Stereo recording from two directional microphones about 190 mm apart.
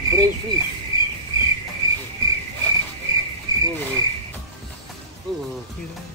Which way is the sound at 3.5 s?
20° right (ahead or behind).